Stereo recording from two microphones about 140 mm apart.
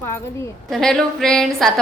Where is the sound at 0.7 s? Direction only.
5° left (ahead or behind).